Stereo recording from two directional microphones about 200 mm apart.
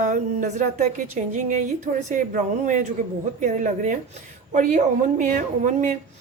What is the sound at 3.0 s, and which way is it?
A woman's voice, 40° right (ahead or behind).